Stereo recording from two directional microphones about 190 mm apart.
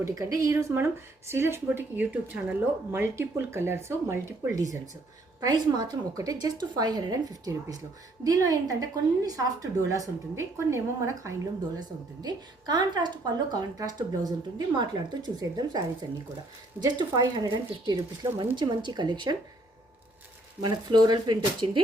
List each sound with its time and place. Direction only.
0.0 s speech: 20° right (ahead or behind)
20.6 s speech: 20° right (ahead or behind)